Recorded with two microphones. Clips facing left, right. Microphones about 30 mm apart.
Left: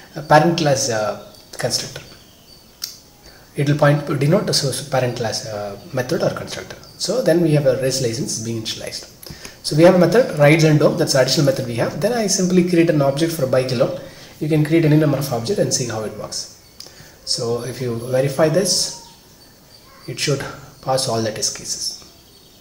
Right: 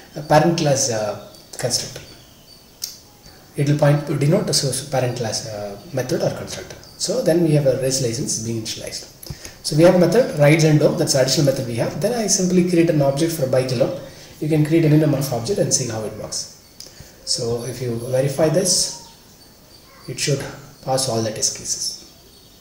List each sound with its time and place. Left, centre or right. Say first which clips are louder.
0.3 s speech: left 2 dB; centre
2.8 s a sound: left 1 dB; left
3.5 s speech: left 1 dB; centre
20.1 s speech: left 1 dB; centre